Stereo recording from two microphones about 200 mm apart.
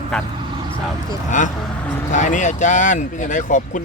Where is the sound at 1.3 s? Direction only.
40° left (ahead or behind).